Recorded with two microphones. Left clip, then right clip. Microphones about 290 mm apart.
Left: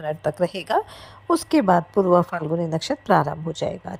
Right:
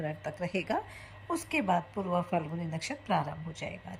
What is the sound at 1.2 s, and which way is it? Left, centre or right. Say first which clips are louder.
Speech: left 12 dB; left.